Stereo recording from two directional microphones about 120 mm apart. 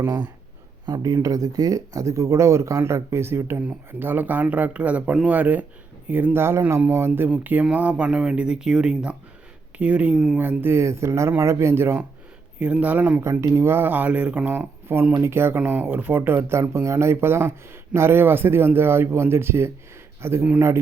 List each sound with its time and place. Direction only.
0.9 s speech: 30° right (ahead or behind)